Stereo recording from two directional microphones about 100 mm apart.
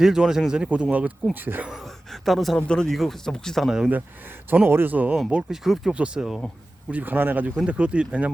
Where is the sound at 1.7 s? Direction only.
Centre (ahead or behind).